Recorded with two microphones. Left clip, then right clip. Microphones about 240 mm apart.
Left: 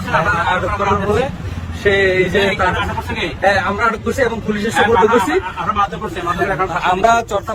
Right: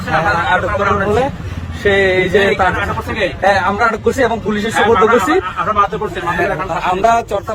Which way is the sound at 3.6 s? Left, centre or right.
Right.